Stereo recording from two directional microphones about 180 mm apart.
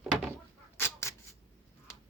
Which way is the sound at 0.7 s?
15° left (ahead or behind).